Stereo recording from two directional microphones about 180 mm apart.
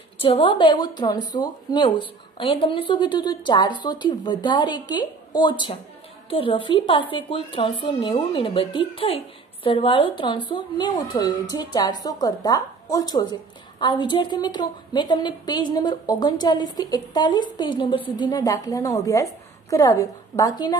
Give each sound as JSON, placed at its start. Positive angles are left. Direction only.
{"t": 0.2, "sound": "a woman's voice", "side_deg": 30}